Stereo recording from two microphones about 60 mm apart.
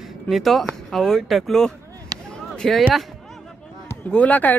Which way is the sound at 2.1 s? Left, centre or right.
Right.